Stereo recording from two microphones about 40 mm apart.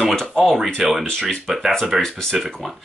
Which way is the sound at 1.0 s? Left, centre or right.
Centre.